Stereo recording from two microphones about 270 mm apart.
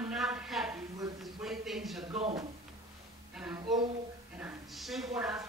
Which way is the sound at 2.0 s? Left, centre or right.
Centre.